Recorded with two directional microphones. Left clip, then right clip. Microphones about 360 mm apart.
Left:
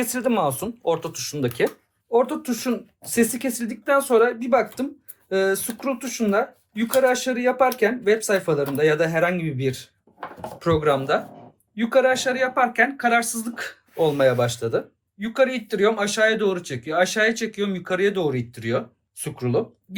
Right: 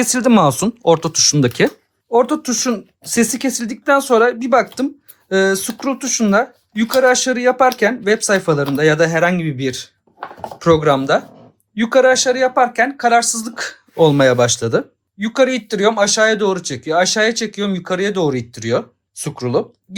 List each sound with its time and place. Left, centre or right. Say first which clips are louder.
0.0 s speech: right 9 dB; right